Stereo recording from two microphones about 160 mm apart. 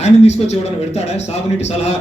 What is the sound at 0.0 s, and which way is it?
A man's voice, 45° left (ahead or behind).